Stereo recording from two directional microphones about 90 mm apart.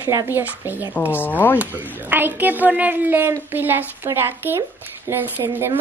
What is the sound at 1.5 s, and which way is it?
Speech, 20° right (ahead or behind).